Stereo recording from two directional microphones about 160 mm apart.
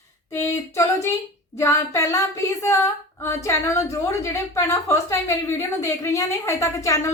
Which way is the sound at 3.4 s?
20° left (ahead or behind).